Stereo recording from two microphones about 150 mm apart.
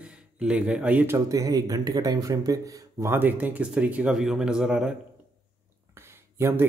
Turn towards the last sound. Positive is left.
turn(degrees=-15)  # may be behind; listen again after turning